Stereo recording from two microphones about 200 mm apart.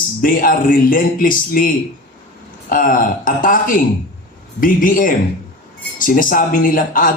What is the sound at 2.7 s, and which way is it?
A man's voice, 45° left (ahead or behind).